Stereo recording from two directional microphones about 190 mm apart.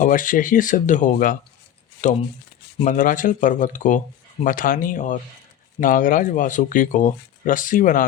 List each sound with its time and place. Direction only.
0.0 s speech: 45° left (ahead or behind)